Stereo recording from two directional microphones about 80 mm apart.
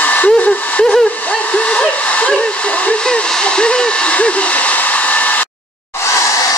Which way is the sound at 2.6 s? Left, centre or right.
Centre.